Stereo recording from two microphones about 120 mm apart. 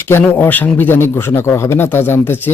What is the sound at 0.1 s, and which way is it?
A man's voice, 15° left (ahead or behind).